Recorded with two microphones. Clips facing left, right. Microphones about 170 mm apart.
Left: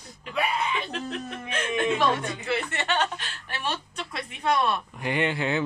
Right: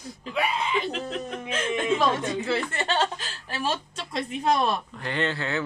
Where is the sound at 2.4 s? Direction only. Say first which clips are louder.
Right 2 dB; 30° right (ahead or behind).